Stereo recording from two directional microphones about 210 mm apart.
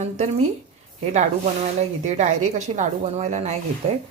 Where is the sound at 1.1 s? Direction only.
35° right (ahead or behind).